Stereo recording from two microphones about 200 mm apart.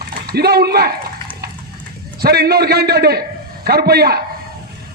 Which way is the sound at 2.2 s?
55° right (ahead or behind).